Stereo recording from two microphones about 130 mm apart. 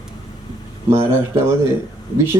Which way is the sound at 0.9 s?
20° right (ahead or behind).